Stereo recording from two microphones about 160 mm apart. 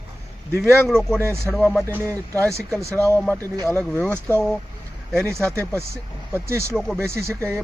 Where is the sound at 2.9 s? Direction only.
15° left (ahead or behind).